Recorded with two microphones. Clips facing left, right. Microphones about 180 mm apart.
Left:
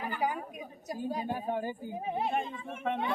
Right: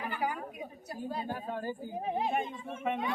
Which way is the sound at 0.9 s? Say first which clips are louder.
Left 3 dB; 15° left (ahead or behind).